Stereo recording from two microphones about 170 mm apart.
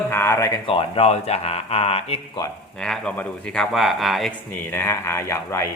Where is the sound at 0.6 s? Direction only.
30° left (ahead or behind).